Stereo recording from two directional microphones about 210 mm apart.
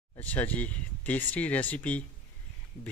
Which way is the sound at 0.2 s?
10° left (ahead or behind).